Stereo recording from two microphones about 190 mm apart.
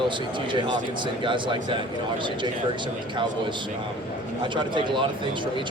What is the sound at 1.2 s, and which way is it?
Speech, 25° right (ahead or behind).